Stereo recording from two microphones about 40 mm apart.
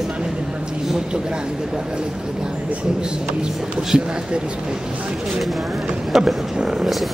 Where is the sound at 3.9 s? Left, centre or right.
Centre.